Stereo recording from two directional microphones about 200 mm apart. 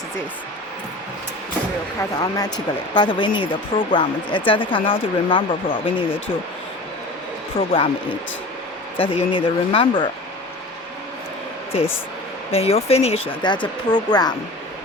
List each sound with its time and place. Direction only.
2.0 s speech: 20° left (ahead or behind)
7.5 s speech: 25° left (ahead or behind)
9.0 s speech: 25° left (ahead or behind)
12.5 s speech: 30° left (ahead or behind)